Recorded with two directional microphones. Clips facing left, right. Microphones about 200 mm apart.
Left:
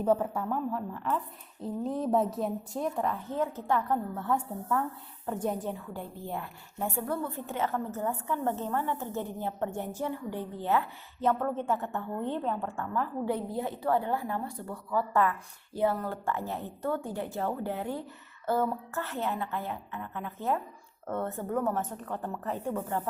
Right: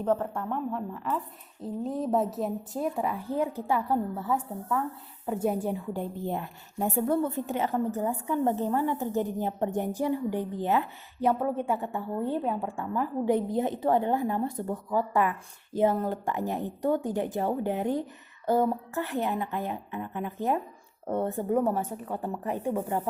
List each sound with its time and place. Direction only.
0.0 s a woman's voice: 5° left (ahead or behind); by 23.0 s 15° right (ahead or behind)